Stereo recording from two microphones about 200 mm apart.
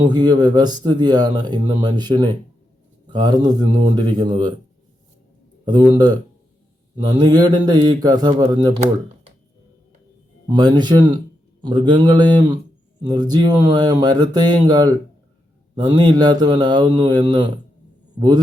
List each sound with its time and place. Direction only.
0.1 s speech: 20° right (ahead or behind)
5.6 s speech: 20° right (ahead or behind)
10.5 s speech: 20° right (ahead or behind)